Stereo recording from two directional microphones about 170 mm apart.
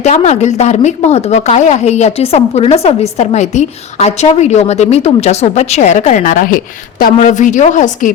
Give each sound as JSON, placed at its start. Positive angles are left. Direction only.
{"t": 0.0, "sound": "a woman's voice", "side_deg": 40}